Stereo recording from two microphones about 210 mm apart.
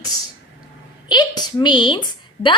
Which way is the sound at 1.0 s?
20° left (ahead or behind).